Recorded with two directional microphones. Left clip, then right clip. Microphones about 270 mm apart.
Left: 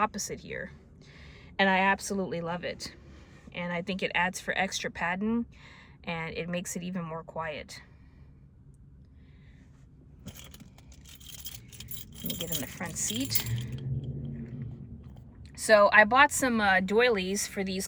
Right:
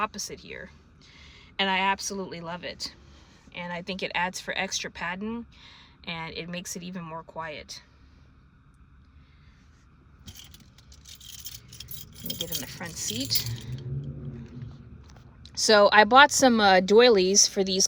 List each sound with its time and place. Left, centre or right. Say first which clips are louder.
0.0 s speech: left 1 dB; centre
12.3 s speech: right 3 dB; centre
15.4 s speech: right 2 dB; right